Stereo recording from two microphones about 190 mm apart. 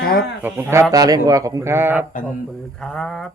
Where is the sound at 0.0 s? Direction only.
55° left (ahead or behind).